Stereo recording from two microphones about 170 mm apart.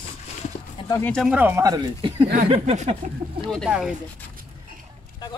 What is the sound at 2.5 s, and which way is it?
Speech, 40° right (ahead or behind).